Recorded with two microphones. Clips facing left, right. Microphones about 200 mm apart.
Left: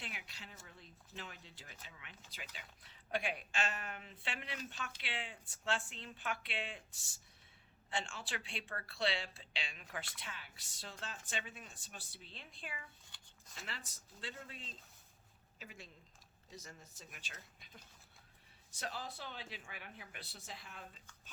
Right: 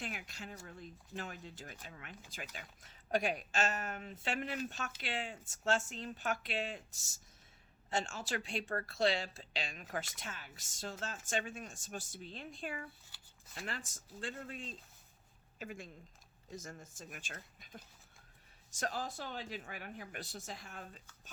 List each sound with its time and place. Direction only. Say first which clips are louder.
0.0 s speech: right 7 dB; 45° right (ahead or behind)
13.1 s shuffling cards: even; 5° right (ahead or behind)
13.7 s speech: right 6 dB; 45° right (ahead or behind)